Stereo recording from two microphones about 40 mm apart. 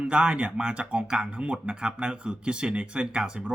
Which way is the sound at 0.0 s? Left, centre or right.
Right.